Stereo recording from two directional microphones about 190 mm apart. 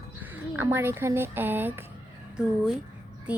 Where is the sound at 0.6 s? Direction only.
10° right (ahead or behind).